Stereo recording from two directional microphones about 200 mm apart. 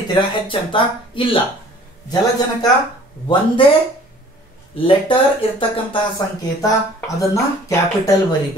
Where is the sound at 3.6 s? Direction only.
25° left (ahead or behind).